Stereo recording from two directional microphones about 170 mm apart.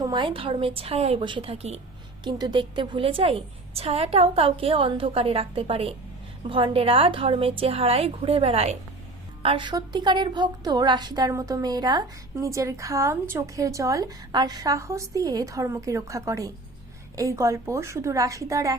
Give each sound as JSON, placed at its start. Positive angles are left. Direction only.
{"t": 0.0, "sound": "a woman's voice", "side_deg": -25}
{"t": 2.2, "sound": "a woman's voice", "side_deg": -25}